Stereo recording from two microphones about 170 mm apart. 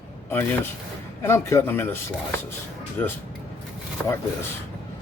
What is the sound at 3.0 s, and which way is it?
Speech, 10° left (ahead or behind).